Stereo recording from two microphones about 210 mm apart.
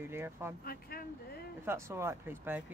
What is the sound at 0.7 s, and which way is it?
Speech, 45° left (ahead or behind).